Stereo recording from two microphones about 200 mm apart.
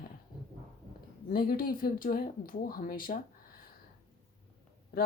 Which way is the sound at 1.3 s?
45° left (ahead or behind).